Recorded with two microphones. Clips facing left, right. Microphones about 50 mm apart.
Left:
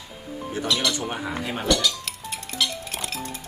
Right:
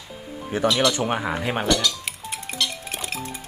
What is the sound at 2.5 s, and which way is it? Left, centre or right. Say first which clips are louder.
Music: even; right.